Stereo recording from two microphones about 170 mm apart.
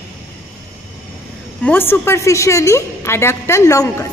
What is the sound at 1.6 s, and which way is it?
A woman's voice, 10° left (ahead or behind).